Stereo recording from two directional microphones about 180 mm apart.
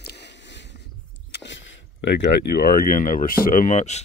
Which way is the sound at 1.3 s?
85° left.